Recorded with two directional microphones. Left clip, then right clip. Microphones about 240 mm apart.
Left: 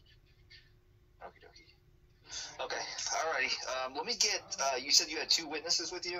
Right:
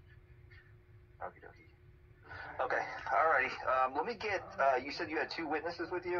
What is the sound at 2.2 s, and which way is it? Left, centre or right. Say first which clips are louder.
A man's voice: right 3 dB; left.